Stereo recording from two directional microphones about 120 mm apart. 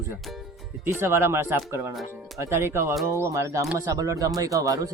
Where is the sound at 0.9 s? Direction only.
20° right (ahead or behind).